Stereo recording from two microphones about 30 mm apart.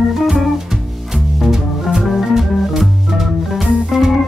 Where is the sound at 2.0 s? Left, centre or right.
Centre.